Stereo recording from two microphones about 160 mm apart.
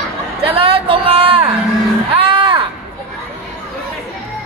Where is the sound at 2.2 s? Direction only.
30° right (ahead or behind).